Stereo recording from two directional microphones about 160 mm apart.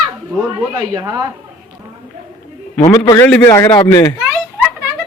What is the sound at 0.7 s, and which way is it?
Speech, 25° right (ahead or behind).